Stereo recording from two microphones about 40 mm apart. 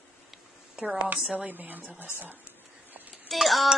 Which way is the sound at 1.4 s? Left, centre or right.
Right.